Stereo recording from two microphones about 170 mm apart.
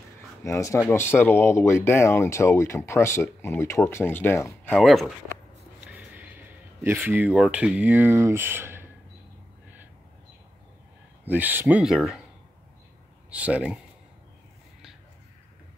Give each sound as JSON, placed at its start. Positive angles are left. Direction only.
{"t": 0.4, "sound": "speech", "side_deg": 20}
{"t": 4.7, "sound": "speech", "side_deg": 0}
{"t": 5.9, "sound": "a sound", "side_deg": -10}
{"t": 6.8, "sound": "speech", "side_deg": -15}
{"t": 11.2, "sound": "speech", "side_deg": -10}
{"t": 13.3, "sound": "speech", "side_deg": -5}